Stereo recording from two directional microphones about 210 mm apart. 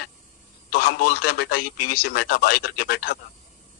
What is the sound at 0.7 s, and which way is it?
A man's voice, 45° left (ahead or behind).